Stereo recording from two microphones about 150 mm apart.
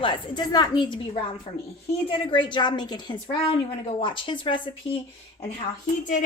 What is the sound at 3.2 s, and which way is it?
A woman's voice, 40° left (ahead or behind).